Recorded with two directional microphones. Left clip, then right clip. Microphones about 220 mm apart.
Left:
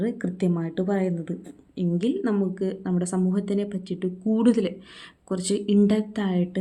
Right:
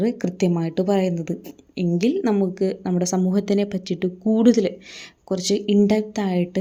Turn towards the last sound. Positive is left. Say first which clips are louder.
# right 4 dB
turn(degrees=-20)  # may be behind; listen again after turning